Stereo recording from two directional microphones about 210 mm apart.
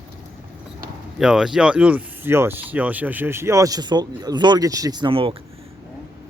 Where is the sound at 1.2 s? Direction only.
5° right (ahead or behind).